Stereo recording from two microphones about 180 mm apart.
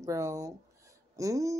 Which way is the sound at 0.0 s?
20° right (ahead or behind).